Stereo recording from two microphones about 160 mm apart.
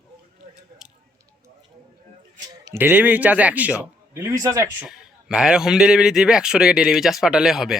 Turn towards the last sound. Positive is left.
turn(degrees=-5)  # may be behind; listen again after turning